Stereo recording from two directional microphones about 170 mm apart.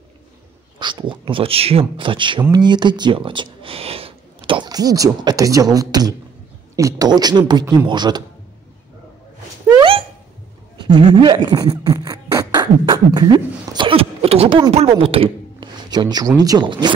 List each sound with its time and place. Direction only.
0.7 s speech: 25° right (ahead or behind)
9.8 s dog: 30° right (ahead or behind)
10.8 s beatboxing: 30° right (ahead or behind)
13.7 s a sound: 35° right (ahead or behind)
14.7 s speech: 35° right (ahead or behind)